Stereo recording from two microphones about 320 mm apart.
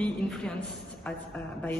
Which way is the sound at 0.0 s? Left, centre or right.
Centre.